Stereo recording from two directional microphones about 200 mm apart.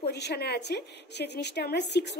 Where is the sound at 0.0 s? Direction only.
55° left (ahead or behind).